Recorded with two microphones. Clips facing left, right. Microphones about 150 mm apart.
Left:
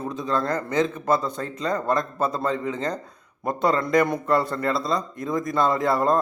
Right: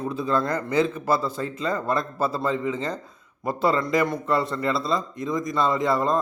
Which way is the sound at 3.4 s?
5° right (ahead or behind).